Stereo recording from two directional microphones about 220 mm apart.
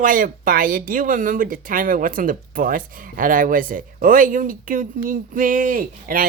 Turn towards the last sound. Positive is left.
turn(degrees=-40)  # may be behind; listen again after turning